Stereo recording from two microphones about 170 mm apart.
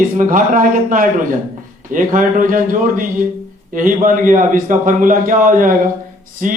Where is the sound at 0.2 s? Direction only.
50° right (ahead or behind).